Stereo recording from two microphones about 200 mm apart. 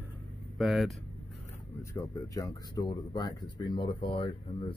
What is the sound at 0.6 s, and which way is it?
Speech, centre (ahead or behind).